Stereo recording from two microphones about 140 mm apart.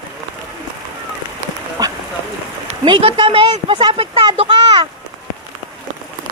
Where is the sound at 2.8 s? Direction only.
35° right (ahead or behind).